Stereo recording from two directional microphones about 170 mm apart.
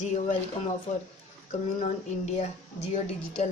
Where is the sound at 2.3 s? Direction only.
40° left (ahead or behind).